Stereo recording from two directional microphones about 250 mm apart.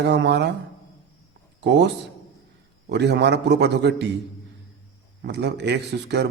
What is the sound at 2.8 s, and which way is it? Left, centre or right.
A man's voice, right.